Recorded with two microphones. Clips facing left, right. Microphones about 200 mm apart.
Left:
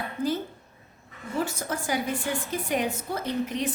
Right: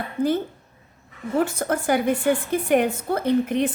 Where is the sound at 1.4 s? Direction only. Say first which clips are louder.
Right 7 dB; 55° right (ahead or behind).